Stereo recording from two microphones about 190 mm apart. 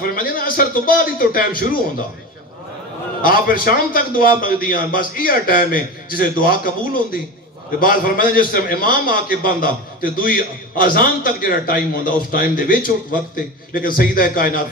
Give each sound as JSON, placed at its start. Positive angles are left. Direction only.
{"t": 0.0, "sound": "a man's voice", "side_deg": 50}
{"t": 3.3, "sound": "a man's voice", "side_deg": 50}